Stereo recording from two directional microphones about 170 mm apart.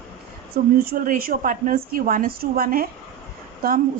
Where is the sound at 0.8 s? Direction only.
55° right (ahead or behind).